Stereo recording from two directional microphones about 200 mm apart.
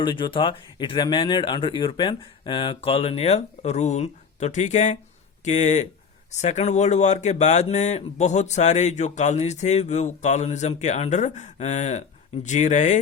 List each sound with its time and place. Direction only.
0.0 s speech: 25° left (ahead or behind)